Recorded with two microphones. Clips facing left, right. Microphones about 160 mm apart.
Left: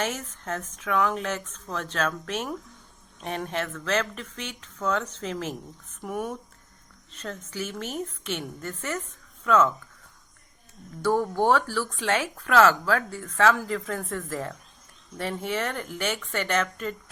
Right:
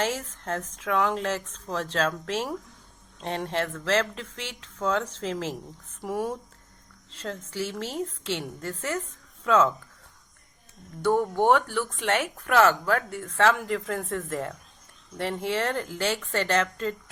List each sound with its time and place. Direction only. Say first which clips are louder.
0.0 s speech: right 2 dB; 30° right (ahead or behind)
11.0 s speech: right 1 dB; 20° right (ahead or behind)